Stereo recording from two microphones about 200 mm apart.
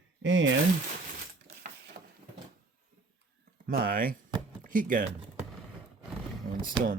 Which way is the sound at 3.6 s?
45° right (ahead or behind).